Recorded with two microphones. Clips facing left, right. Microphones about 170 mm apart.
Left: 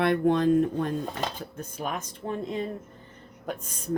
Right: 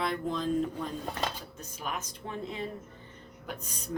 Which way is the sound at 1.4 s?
50° left (ahead or behind).